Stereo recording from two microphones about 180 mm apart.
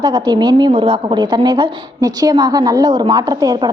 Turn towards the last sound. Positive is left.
turn(degrees=-20)  # may be behind; listen again after turning